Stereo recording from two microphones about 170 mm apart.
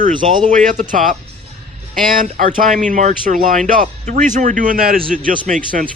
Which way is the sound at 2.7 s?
50° right (ahead or behind).